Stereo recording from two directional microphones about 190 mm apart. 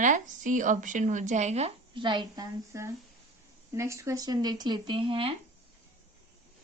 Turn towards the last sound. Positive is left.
turn(degrees=-25)  # may be behind; listen again after turning